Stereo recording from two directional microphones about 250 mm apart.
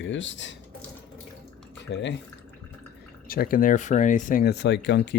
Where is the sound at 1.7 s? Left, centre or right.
Left.